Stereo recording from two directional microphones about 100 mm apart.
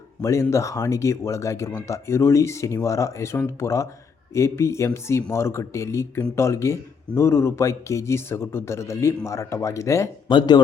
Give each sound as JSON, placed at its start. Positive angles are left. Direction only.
{"t": 0.2, "sound": "a man's voice", "side_deg": 30}
{"t": 10.2, "sound": "speech", "side_deg": 45}